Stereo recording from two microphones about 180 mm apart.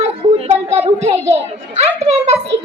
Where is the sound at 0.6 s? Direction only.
35° right (ahead or behind).